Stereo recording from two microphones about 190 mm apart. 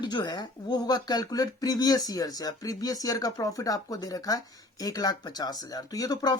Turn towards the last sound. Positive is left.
turn(degrees=20)  # may be behind; listen again after turning